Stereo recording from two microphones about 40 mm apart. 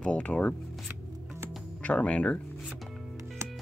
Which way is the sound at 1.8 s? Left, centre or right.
Left.